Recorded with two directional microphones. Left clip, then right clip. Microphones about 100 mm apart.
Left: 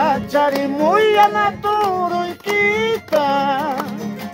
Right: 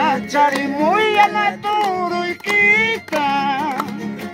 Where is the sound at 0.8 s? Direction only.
50° left (ahead or behind).